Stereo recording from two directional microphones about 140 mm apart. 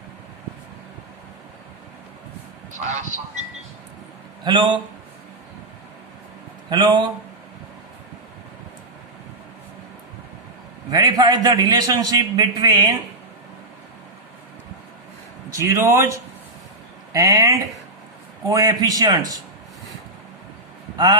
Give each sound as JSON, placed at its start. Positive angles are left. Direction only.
{"t": 2.7, "sound": "speech", "side_deg": -60}
{"t": 4.4, "sound": "speech", "side_deg": -35}
{"t": 6.7, "sound": "speech", "side_deg": -30}
{"t": 10.9, "sound": "a man's voice", "side_deg": -30}
{"t": 15.5, "sound": "a man's voice", "side_deg": -20}